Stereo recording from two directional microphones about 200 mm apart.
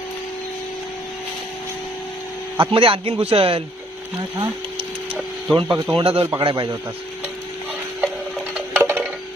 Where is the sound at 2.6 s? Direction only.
25° right (ahead or behind).